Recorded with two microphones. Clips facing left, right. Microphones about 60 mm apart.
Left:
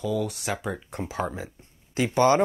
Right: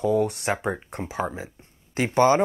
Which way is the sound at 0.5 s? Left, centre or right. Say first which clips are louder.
Right 4 dB; right.